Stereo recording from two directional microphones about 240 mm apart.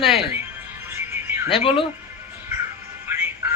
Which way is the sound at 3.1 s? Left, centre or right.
Centre.